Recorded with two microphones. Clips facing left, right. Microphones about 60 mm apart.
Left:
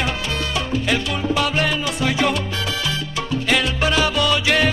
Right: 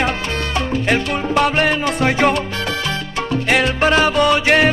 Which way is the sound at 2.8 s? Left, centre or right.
Right.